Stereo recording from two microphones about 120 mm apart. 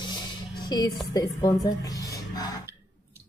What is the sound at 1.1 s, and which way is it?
A woman's voice, 30° left (ahead or behind).